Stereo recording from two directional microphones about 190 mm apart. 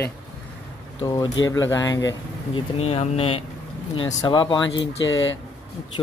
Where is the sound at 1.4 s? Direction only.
20° left (ahead or behind).